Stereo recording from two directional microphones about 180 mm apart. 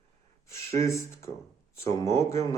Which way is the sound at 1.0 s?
15° left (ahead or behind).